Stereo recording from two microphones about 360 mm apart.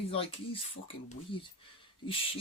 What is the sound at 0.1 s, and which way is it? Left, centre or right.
Speech, centre.